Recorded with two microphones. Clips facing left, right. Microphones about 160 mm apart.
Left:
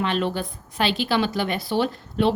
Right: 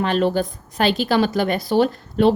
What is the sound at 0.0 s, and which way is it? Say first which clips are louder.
A woman's voice: right 5 dB; 40° right (ahead or behind).